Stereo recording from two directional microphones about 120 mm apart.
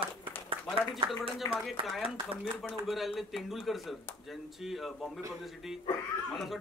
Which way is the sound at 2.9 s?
Centre (ahead or behind).